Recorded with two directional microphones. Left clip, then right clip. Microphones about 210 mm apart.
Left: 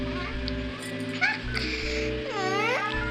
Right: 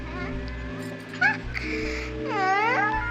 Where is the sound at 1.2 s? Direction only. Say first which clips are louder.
Right 3 dB; 45° right (ahead or behind); by 2.9 s 25° right (ahead or behind).